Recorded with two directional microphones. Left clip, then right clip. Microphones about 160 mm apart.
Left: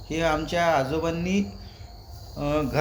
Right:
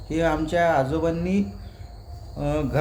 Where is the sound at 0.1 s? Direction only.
20° right (ahead or behind).